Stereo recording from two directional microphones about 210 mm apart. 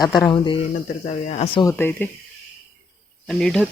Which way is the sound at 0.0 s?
20° left (ahead or behind).